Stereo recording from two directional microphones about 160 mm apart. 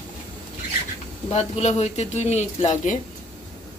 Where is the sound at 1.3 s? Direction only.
40° left (ahead or behind).